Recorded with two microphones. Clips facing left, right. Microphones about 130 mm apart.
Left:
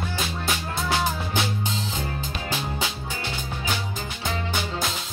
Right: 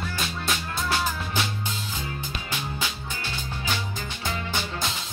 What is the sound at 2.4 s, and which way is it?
Music, 35° left (ahead or behind).